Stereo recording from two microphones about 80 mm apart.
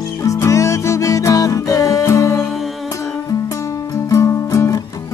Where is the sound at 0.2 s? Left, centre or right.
Left.